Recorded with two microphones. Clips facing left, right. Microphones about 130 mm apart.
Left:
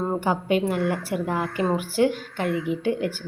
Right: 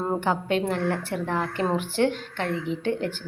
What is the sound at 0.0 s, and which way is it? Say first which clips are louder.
A woman's voice: left 1 dB; 5° left (ahead or behind).